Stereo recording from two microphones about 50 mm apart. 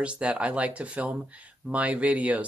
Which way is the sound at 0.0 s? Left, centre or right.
Right.